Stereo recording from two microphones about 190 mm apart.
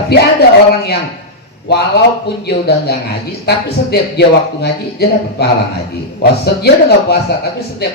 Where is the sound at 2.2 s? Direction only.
60° left (ahead or behind).